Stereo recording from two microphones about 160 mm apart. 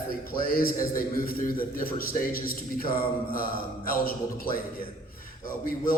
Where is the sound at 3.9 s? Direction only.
65° left (ahead or behind).